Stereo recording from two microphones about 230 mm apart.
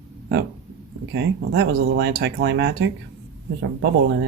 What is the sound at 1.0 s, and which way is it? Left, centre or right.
Speech, right.